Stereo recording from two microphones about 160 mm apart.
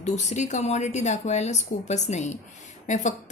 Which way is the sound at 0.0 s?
45° left (ahead or behind).